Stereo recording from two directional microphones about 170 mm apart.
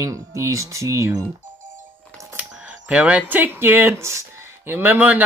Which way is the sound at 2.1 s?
5° right (ahead or behind).